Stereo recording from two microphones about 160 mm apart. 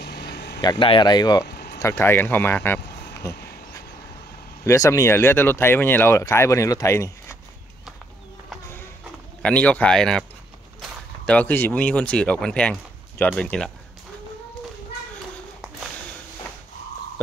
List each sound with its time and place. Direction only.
0.0 s vehicle: 90° left
0.6 s speech: 30° left (ahead or behind)
1.5 s a sound: 90° left
1.8 s speech: 15° left (ahead or behind)
3.2 s a sound: 20° left (ahead or behind)
4.6 s speech: 20° left (ahead or behind)
9.4 s speech: 10° left (ahead or behind)